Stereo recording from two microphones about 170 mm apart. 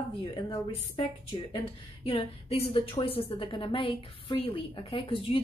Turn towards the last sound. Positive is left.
turn(degrees=30)  # may be behind; listen again after turning